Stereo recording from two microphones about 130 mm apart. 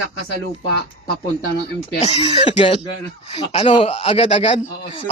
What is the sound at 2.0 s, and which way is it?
Speech, 55° left (ahead or behind).